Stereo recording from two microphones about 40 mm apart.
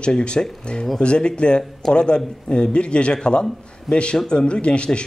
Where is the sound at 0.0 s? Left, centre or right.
Left.